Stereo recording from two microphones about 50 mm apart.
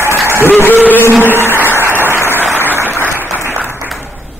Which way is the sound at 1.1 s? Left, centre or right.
Right.